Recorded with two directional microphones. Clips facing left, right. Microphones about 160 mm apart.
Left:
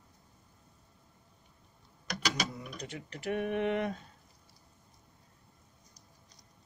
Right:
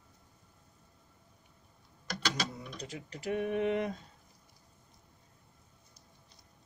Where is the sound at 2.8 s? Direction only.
30° right (ahead or behind).